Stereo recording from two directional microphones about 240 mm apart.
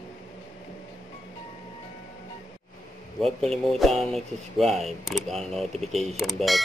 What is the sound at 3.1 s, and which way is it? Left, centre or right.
Speech, centre.